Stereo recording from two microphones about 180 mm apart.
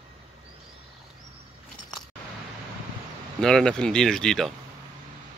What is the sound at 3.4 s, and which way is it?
Speech, 5° left (ahead or behind).